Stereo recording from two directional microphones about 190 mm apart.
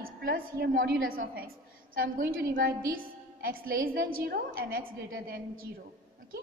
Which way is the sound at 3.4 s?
50° right (ahead or behind).